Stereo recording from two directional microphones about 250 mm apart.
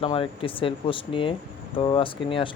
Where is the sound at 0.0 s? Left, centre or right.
Left.